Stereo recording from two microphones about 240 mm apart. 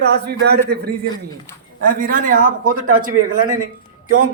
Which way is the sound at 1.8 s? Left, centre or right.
Right.